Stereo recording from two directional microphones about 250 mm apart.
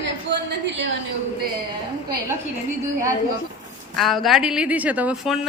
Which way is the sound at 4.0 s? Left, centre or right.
Centre.